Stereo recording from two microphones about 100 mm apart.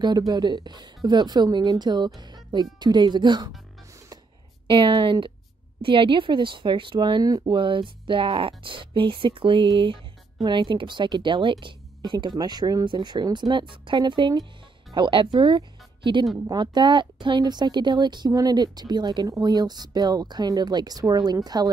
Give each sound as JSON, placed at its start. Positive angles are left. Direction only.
{"t": 0.3, "sound": "speech", "side_deg": -45}
{"t": 4.6, "sound": "speech", "side_deg": -60}
{"t": 7.5, "sound": "speech", "side_deg": -55}